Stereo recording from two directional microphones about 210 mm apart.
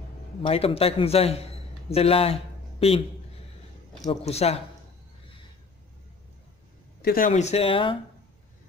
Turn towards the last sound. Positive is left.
turn(degrees=25)  # may be behind; listen again after turning